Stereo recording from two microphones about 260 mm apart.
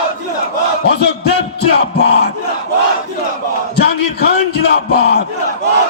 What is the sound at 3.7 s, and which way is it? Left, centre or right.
Battle cry, left.